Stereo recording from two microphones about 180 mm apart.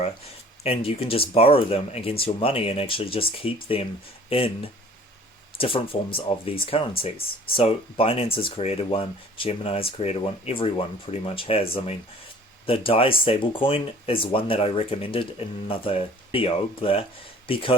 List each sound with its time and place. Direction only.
0.6 s speech: 30° left (ahead or behind)